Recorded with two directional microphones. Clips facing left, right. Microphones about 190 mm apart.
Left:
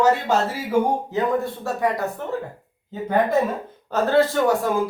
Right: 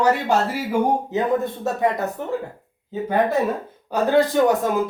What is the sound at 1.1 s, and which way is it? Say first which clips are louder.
Speech: right 1 dB; 20° right (ahead or behind).